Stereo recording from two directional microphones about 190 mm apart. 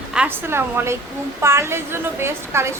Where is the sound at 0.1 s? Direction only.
10° right (ahead or behind).